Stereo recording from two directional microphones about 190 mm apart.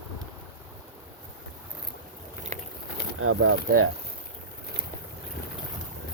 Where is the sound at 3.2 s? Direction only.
90° right.